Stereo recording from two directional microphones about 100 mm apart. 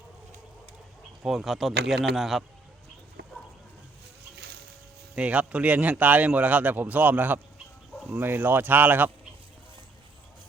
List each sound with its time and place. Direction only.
1.2 s speech: centre (ahead or behind)
5.1 s a man's voice: 10° right (ahead or behind)